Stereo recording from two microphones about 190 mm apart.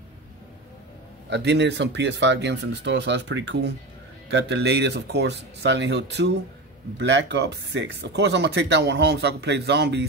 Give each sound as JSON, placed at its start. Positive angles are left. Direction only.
{"t": 1.3, "sound": "speech", "side_deg": -65}